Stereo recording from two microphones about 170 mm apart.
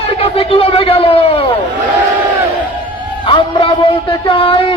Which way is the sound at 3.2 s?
30° left (ahead or behind).